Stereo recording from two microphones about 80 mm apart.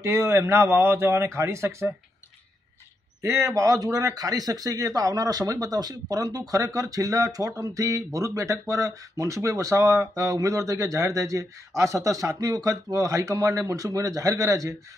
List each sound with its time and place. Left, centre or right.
0.0 s a man's voice: right
3.2 s speech: right